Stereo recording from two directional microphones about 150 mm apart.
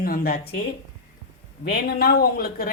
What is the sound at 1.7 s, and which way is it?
Speech, 90° left.